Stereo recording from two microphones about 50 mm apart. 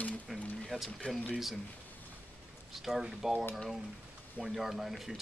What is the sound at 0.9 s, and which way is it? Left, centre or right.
Speech, centre.